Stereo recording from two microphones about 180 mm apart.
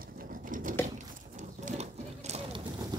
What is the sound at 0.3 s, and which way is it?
Patter, 50° right (ahead or behind).